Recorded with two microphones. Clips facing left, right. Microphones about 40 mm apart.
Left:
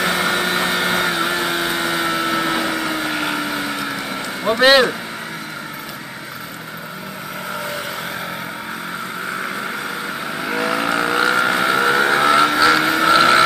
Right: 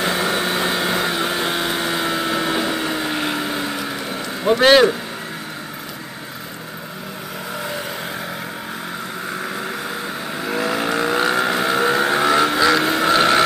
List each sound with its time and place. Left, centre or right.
0.0 s a sound: left
0.7 s vehicle: centre
1.6 s vehicle: centre
4.5 s speech: centre
10.3 s vehicle: centre
12.9 s a sound: centre